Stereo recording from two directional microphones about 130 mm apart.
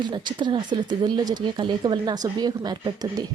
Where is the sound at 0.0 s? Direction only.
35° right (ahead or behind).